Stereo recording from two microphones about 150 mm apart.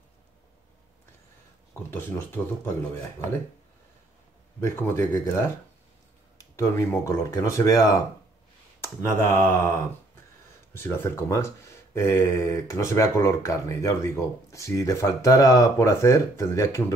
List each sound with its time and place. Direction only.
1.7 s speech: 15° left (ahead or behind)
4.7 s speech: 15° left (ahead or behind)
6.5 s speech: 20° left (ahead or behind)
10.7 s speech: 15° left (ahead or behind)